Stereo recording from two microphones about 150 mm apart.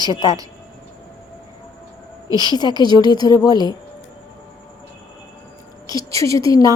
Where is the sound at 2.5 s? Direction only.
25° left (ahead or behind).